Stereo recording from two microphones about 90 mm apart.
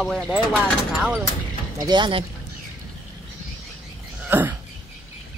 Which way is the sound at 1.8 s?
55° right (ahead or behind).